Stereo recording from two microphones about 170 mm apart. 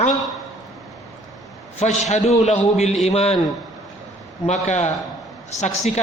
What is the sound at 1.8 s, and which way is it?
A man's voice, 40° left (ahead or behind).